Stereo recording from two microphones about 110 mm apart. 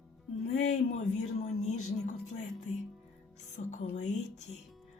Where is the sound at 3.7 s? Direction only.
90° left.